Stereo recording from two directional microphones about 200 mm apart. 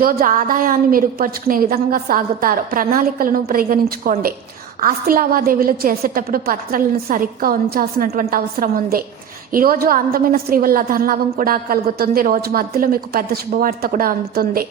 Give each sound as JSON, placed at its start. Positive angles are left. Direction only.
{"t": 0.0, "sound": "a woman's voice", "side_deg": -45}